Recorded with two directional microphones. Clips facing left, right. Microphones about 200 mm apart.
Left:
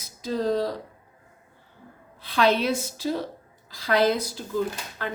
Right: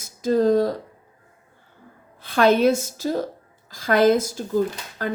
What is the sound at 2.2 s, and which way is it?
Speech, 50° right (ahead or behind).